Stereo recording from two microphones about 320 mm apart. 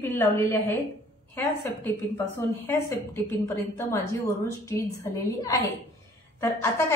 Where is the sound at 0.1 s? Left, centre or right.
Centre.